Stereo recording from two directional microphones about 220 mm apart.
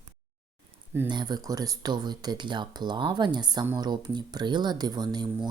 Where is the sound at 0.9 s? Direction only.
20° right (ahead or behind).